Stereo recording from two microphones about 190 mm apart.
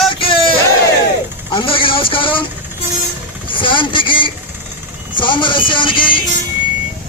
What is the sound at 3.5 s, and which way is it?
Speech, 25° left (ahead or behind).